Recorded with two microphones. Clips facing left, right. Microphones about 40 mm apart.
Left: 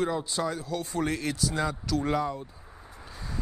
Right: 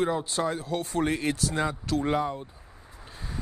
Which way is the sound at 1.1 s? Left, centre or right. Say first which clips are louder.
Right 2 dB; right.